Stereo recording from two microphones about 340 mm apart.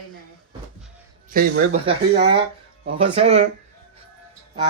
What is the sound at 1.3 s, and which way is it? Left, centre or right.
Speech, right.